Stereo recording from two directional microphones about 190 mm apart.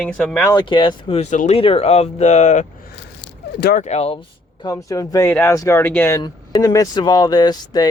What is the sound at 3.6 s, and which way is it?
Speech, 60° left (ahead or behind).